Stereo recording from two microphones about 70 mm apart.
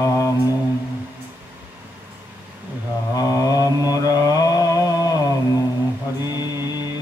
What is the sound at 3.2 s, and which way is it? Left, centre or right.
Mantra, left.